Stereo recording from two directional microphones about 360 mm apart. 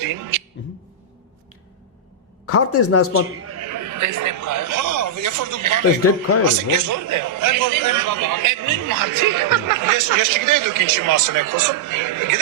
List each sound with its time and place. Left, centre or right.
0.0 s a man's voice: right
2.5 s speech: left
3.4 s a man's voice: right